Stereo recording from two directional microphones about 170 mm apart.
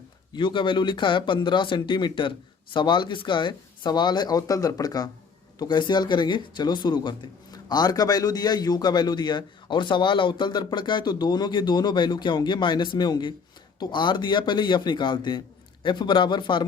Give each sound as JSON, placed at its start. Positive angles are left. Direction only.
{"t": 0.3, "sound": "speech", "side_deg": 25}